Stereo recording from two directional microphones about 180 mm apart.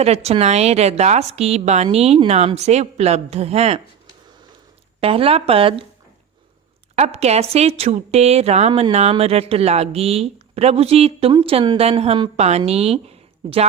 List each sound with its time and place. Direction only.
0.0 s a woman's voice: 35° right (ahead or behind)
4.9 s a woman's voice: 30° right (ahead or behind)
6.9 s a woman's voice: 35° right (ahead or behind)